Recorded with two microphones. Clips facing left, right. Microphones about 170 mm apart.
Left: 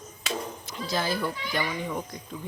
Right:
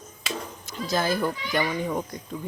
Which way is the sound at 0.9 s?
45° right (ahead or behind).